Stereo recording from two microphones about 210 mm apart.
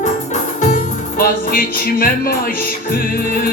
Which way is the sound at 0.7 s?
45° left (ahead or behind).